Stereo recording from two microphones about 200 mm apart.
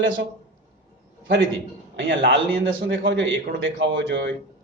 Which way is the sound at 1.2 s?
65° right (ahead or behind).